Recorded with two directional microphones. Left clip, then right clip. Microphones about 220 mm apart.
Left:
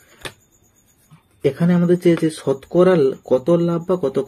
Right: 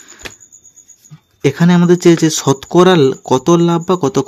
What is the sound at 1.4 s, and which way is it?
Speech, 40° right (ahead or behind).